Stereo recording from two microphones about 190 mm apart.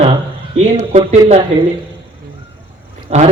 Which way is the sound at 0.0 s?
30° right (ahead or behind).